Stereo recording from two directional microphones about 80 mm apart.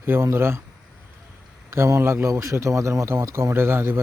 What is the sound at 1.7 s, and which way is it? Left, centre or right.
A man's voice, right.